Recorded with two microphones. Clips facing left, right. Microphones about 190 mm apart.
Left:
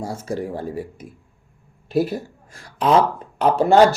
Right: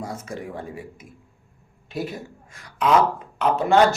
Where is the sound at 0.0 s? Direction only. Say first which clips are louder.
Left 6 dB; 30° left (ahead or behind).